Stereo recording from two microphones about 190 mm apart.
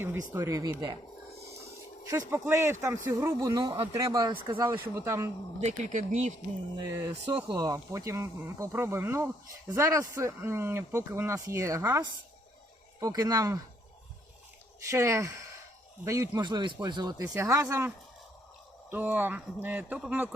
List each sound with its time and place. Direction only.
0.0 s speech: 10° right (ahead or behind)
2.3 s speech: 15° right (ahead or behind)
5.5 s speech: 35° right (ahead or behind)
7.3 s speech: 25° right (ahead or behind)
14.8 s speech: 15° right (ahead or behind)